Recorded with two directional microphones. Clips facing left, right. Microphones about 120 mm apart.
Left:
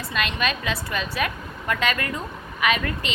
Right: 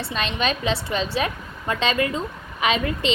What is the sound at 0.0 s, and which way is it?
A woman's voice, 30° right (ahead or behind).